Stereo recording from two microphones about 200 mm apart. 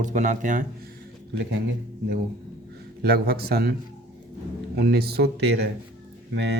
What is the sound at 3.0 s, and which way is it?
Speech, 50° right (ahead or behind).